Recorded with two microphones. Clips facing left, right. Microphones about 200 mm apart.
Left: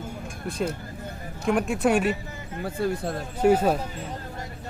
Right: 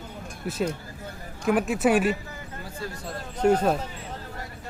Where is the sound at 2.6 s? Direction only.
55° left (ahead or behind).